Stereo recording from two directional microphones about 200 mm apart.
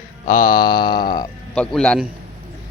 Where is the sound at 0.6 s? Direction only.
20° left (ahead or behind).